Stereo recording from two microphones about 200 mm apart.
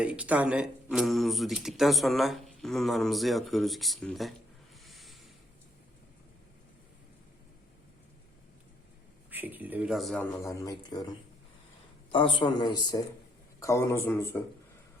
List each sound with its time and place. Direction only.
0.0 s speech: 5° right (ahead or behind)
4.8 s a sound: centre (ahead or behind)
9.3 s speech: 10° right (ahead or behind); by 11.0 s 20° left (ahead or behind)
12.1 s a man's voice: 25° left (ahead or behind)